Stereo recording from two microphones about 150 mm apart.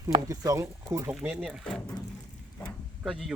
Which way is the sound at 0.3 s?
25° right (ahead or behind).